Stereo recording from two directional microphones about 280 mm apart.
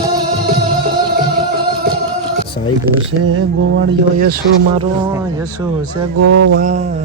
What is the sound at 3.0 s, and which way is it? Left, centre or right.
Speech, right.